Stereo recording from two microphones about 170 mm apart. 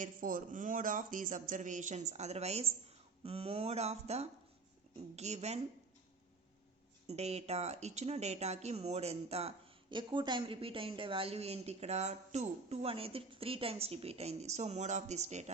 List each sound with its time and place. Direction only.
0.0 s speech: 55° right (ahead or behind)
7.1 s speech: 40° right (ahead or behind)